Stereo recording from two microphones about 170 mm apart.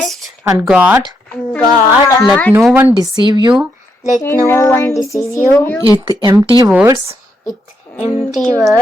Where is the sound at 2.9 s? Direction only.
25° right (ahead or behind).